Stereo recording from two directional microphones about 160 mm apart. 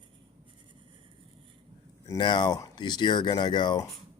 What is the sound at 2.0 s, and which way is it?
Speech, 30° left (ahead or behind).